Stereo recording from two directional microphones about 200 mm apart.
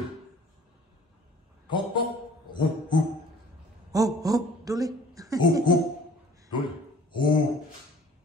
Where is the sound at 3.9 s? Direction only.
15° right (ahead or behind).